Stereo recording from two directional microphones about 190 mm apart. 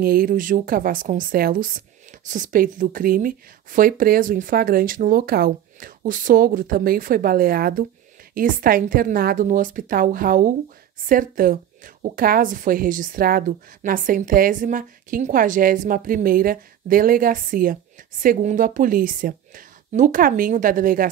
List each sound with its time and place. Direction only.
0.0 s speech: 50° right (ahead or behind)